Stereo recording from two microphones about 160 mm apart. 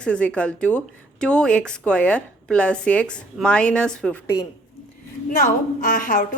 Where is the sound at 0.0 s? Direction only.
5° left (ahead or behind).